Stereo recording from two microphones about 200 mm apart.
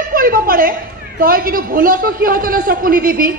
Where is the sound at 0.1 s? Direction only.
45° right (ahead or behind).